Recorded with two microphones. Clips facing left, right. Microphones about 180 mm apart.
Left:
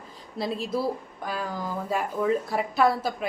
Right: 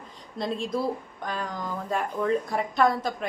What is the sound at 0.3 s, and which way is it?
A woman's voice, 5° left (ahead or behind).